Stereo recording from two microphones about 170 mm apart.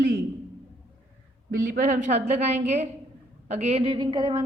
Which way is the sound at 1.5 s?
50° right (ahead or behind).